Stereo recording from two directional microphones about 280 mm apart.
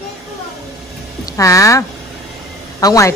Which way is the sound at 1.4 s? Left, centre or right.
Centre.